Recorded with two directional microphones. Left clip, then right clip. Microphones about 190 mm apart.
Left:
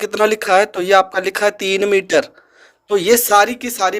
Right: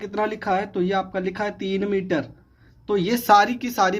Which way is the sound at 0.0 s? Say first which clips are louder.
Left 9 dB; 55° left (ahead or behind).